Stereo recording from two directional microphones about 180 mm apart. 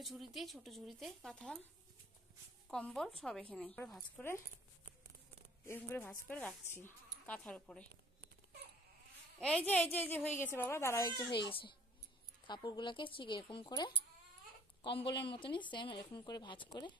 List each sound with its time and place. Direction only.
0.0 s speech: centre (ahead or behind)
2.7 s speech: 5° left (ahead or behind)
5.7 s speech: 10° left (ahead or behind)
9.7 s speech: 10° left (ahead or behind); by 16.9 s 25° left (ahead or behind)